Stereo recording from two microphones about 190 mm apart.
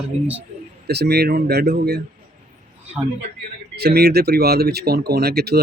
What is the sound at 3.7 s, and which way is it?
Speech, 55° right (ahead or behind).